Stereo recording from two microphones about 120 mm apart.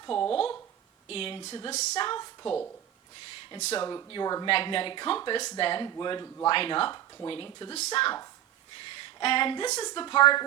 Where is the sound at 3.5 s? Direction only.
65° left (ahead or behind).